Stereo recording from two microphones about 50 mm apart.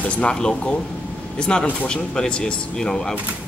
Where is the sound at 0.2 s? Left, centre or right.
Centre.